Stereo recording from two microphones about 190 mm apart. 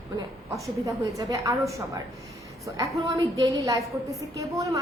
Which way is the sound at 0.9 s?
20° right (ahead or behind).